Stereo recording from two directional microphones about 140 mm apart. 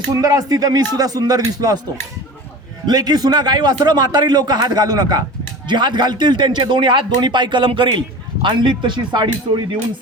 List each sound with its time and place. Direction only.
0.2 s a man's voice: 25° right (ahead or behind)
2.8 s a man's voice: 30° right (ahead or behind)